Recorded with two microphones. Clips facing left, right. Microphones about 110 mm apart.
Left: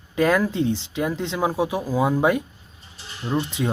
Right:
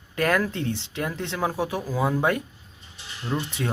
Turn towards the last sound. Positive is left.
turn(degrees=20)  # may be behind; listen again after turning